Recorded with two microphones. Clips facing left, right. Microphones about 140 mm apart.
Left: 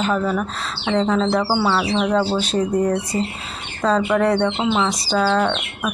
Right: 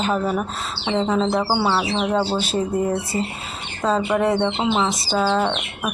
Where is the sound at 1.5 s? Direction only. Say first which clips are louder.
Left 1 dB; 20° right (ahead or behind).